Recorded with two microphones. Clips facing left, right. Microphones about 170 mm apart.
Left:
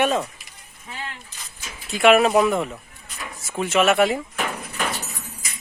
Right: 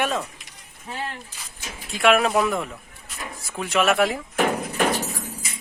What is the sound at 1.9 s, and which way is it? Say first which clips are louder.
Speech: left 3 dB; centre (ahead or behind).